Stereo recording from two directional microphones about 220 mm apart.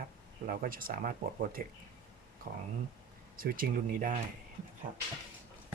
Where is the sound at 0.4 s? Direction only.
40° right (ahead or behind).